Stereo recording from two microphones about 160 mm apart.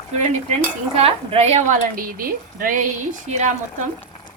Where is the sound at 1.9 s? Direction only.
60° right (ahead or behind).